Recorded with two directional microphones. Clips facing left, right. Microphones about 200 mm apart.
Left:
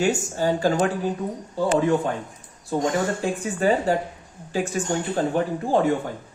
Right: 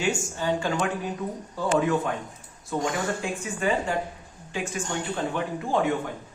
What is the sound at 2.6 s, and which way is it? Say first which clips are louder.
Speech: left 4 dB; 35° left (ahead or behind).